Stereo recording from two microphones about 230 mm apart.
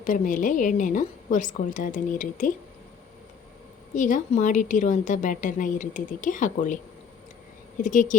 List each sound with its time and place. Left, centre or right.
0.0 s a woman's voice: left
3.9 s a woman's voice: left
7.8 s a woman's voice: left